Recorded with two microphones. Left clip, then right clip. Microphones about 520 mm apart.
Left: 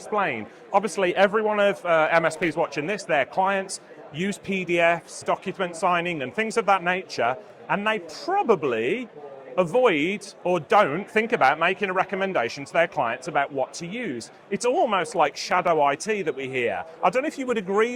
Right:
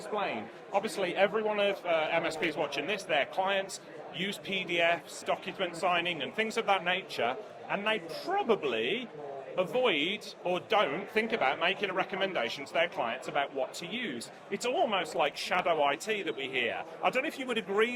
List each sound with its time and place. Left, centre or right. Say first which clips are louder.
0.2 s speech: left 10 dB; left